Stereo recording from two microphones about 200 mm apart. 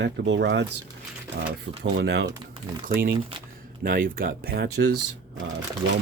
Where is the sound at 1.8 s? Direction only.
55° right (ahead or behind).